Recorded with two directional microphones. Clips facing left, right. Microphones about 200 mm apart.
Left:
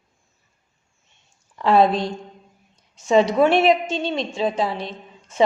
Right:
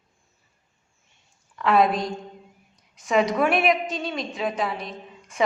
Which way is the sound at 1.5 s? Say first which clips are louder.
Left 3 dB; 30° left (ahead or behind).